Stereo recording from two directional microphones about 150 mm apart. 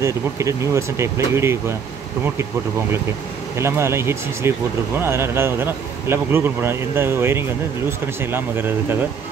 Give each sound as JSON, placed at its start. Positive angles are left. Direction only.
{"t": 0.0, "sound": "speech", "side_deg": -20}
{"t": 3.5, "sound": "speech", "side_deg": -20}